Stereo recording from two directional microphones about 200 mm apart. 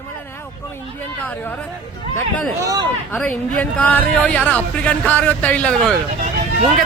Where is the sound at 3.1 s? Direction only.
5° left (ahead or behind).